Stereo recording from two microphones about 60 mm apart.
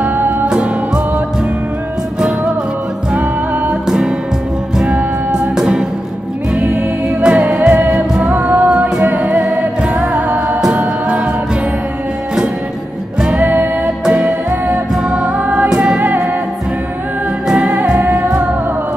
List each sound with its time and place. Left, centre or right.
0.0 s music: right
0.5 s music: centre
3.8 s music: centre
4.8 s music: centre
8.6 s music: centre
9.0 s music: right
13.4 s music: right
14.0 s music: centre
15.7 s music: centre
16.0 s music: right
18.1 s music: centre